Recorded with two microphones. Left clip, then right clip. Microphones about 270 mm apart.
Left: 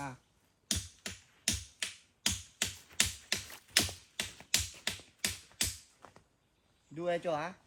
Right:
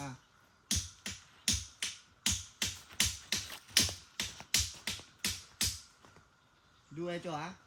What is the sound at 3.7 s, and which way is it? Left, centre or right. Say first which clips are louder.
Music: even; centre.